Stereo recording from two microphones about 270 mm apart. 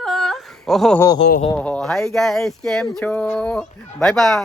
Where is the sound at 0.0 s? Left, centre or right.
Centre.